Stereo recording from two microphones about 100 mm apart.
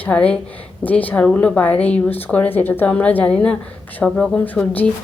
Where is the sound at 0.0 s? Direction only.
10° left (ahead or behind).